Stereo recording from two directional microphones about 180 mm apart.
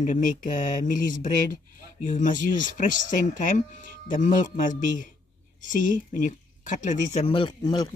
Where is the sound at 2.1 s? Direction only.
45° left (ahead or behind); by 7.8 s 25° left (ahead or behind).